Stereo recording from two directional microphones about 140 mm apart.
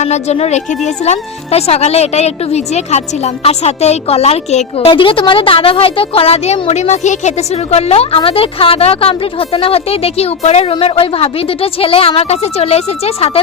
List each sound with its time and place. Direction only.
0.0 s speech: 50° left (ahead or behind)